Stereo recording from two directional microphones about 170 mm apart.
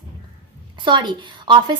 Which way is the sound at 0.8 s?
25° right (ahead or behind).